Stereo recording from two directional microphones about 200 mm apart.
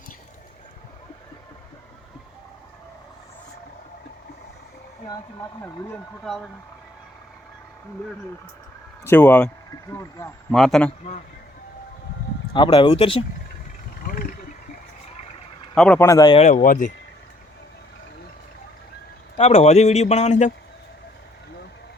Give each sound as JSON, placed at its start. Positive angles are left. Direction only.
{"t": 5.6, "sound": "speech", "side_deg": 5}
{"t": 9.0, "sound": "speech", "side_deg": 10}
{"t": 10.5, "sound": "speech", "side_deg": 0}
{"t": 12.5, "sound": "speech", "side_deg": 25}
{"t": 14.0, "sound": "vehicle", "side_deg": 45}
{"t": 15.7, "sound": "speech", "side_deg": 5}
{"t": 16.4, "sound": "speech", "side_deg": 35}
{"t": 19.4, "sound": "speech", "side_deg": 30}